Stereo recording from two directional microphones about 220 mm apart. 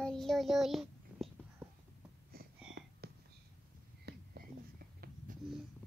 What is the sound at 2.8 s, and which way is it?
Whispering, 45° right (ahead or behind).